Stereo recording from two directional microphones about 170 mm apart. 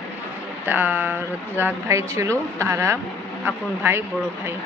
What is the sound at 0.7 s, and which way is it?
A woman's voice, 10° right (ahead or behind).